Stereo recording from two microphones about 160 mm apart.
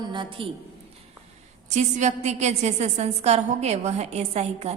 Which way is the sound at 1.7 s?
45° right (ahead or behind).